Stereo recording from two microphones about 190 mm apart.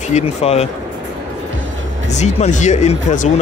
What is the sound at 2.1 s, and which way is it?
Speech, 35° left (ahead or behind).